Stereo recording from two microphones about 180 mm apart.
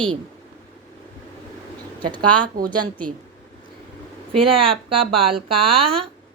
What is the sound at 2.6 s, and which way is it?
Speech, 50° right (ahead or behind).